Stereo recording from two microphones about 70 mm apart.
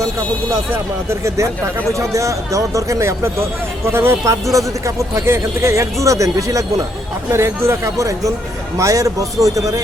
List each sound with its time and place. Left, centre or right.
1.9 s speech: right
3.8 s speech: right
4.5 s speech: right